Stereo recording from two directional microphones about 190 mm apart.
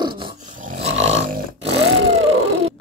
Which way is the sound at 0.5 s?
40° right (ahead or behind).